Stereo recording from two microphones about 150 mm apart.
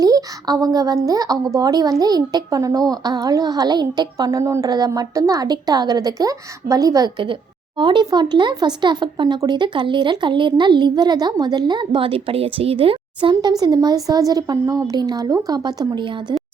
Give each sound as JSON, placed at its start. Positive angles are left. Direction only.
{"t": 0.0, "sound": "speech", "side_deg": -25}